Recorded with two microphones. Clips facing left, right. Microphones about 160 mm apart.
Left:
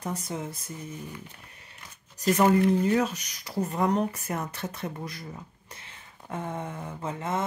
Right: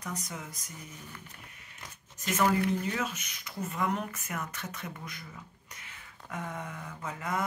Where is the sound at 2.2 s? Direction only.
35° left (ahead or behind).